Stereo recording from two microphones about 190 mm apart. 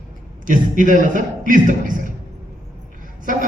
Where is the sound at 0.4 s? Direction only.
45° right (ahead or behind).